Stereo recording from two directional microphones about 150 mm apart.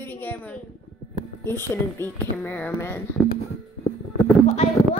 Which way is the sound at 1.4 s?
15° left (ahead or behind).